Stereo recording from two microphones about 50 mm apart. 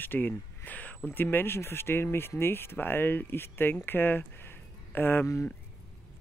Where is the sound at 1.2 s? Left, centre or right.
Left.